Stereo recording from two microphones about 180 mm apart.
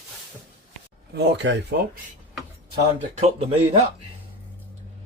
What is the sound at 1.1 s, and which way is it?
Speech, 70° right (ahead or behind).